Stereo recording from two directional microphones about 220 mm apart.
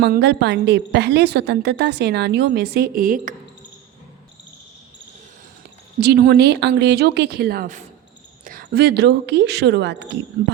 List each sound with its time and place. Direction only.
0.0 s a woman's voice: 50° right (ahead or behind)
6.0 s a woman's voice: 45° right (ahead or behind)